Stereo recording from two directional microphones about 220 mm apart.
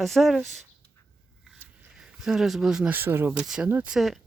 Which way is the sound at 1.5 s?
Centre (ahead or behind).